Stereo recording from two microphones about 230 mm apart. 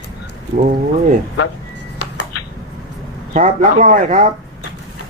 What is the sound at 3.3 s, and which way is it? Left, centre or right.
A man's voice, right.